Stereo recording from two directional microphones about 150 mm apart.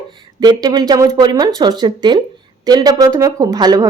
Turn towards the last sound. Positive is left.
turn(degrees=-25)  # may be behind; listen again after turning